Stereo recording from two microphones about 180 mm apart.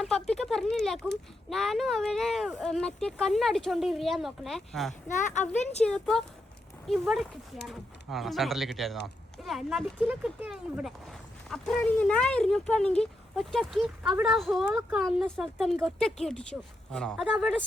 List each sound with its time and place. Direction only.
0.0 s speech: 5° left (ahead or behind)
5.0 s speech: 45° left (ahead or behind)
5.8 s speech: 5° left (ahead or behind)